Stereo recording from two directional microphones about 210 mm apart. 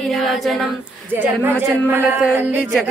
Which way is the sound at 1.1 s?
10° right (ahead or behind).